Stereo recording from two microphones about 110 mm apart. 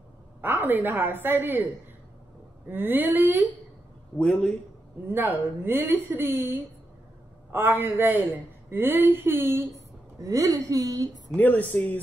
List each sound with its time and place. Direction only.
0.4 s a woman's voice: 20° right (ahead or behind)
2.7 s speech: 20° right (ahead or behind)
4.2 s speech: 10° left (ahead or behind)
5.0 s a man's voice: 20° right (ahead or behind)
11.3 s speech: 15° left (ahead or behind)